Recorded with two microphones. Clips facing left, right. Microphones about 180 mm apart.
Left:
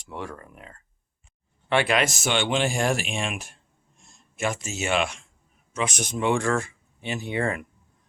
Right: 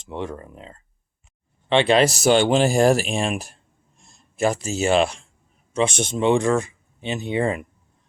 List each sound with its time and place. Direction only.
0.0 s speech: 20° right (ahead or behind)